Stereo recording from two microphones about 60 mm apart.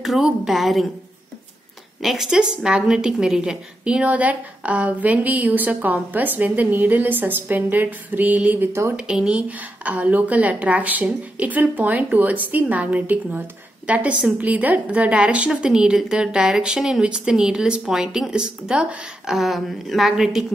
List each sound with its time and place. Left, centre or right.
0.0 s a woman's voice: centre
2.0 s a woman's voice: centre; by 8.6 s right
8.9 s a woman's voice: centre
19.2 s a woman's voice: centre